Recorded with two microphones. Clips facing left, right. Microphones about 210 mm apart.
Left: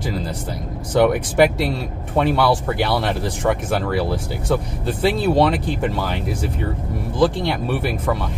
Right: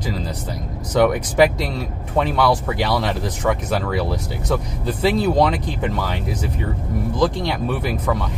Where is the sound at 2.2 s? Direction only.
5° left (ahead or behind).